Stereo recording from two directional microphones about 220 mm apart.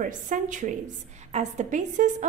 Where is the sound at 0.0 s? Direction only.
35° right (ahead or behind).